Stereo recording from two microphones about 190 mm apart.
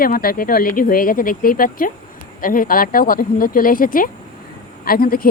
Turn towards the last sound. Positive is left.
turn(degrees=50)  # may be behind; listen again after turning